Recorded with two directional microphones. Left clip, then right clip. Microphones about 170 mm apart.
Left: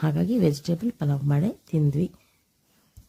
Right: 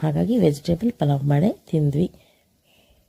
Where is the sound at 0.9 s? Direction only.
15° right (ahead or behind).